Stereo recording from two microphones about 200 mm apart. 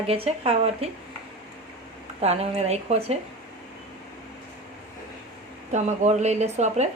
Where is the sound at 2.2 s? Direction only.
30° right (ahead or behind).